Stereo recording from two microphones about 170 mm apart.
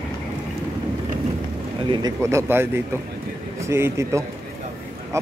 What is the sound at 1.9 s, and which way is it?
A man's voice, 20° right (ahead or behind).